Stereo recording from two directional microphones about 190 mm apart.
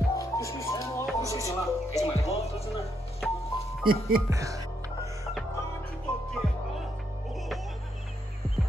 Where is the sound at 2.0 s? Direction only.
35° left (ahead or behind).